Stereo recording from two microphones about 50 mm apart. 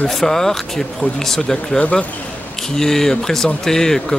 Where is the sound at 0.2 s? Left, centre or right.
Centre.